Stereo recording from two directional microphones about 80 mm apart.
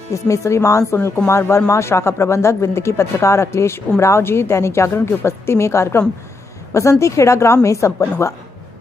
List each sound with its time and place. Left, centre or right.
0.1 s speech: left
0.9 s speech: left